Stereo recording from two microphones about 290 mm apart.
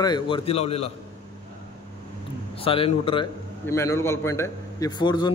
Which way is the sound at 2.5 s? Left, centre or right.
Centre.